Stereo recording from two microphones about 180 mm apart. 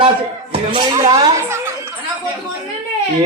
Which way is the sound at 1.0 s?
20° right (ahead or behind).